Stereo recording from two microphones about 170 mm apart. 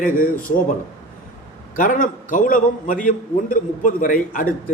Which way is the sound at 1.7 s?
50° left (ahead or behind).